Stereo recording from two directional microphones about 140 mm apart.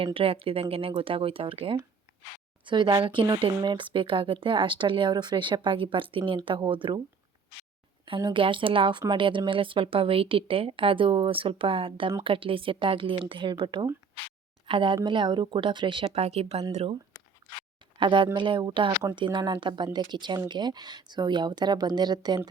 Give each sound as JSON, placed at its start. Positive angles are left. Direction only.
{"t": 0.0, "sound": "speech", "side_deg": -40}
{"t": 8.3, "sound": "speech", "side_deg": -40}
{"t": 18.0, "sound": "speech", "side_deg": -35}